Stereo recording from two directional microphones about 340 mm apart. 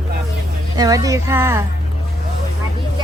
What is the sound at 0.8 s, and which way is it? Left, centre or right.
Speech, centre.